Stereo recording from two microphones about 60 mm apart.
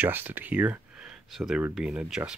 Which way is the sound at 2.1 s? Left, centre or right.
Centre.